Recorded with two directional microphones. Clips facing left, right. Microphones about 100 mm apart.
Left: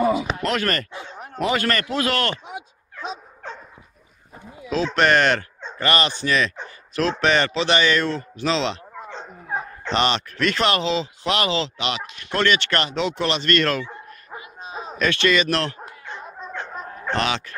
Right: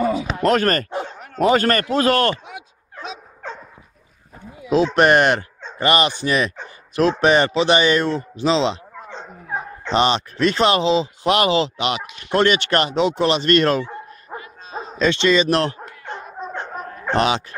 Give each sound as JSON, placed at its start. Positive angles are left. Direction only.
{"t": 0.0, "sound": "a sound", "side_deg": 5}
{"t": 0.4, "sound": "speech", "side_deg": -40}
{"t": 4.6, "sound": "a man's voice", "side_deg": -15}
{"t": 8.9, "sound": "dog", "side_deg": 0}
{"t": 9.9, "sound": "speech", "side_deg": -30}
{"t": 15.0, "sound": "speech", "side_deg": -25}
{"t": 16.3, "sound": "dog", "side_deg": -25}
{"t": 17.1, "sound": "speech", "side_deg": -35}